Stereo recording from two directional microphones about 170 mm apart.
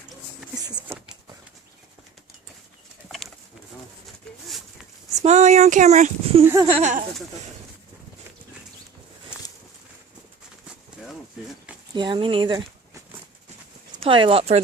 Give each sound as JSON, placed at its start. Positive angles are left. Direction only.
{"t": 5.2, "sound": "speech", "side_deg": -45}
{"t": 6.4, "sound": "speech", "side_deg": -15}
{"t": 6.7, "sound": "speech", "side_deg": -35}
{"t": 11.9, "sound": "speech", "side_deg": -30}
{"t": 14.0, "sound": "speech", "side_deg": -30}